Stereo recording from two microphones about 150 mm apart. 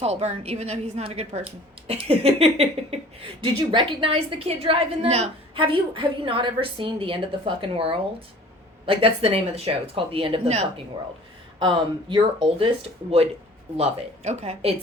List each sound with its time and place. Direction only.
0.0 s a woman's voice: 45° right (ahead or behind)
11.6 s a woman's voice: 30° right (ahead or behind)
14.3 s a woman's voice: 45° right (ahead or behind)